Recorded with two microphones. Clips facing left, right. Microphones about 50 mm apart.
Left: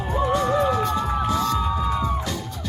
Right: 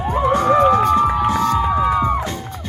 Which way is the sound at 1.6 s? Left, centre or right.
Right.